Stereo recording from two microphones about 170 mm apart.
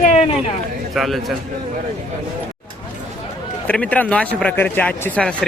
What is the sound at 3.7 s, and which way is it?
Speech, 10° left (ahead or behind).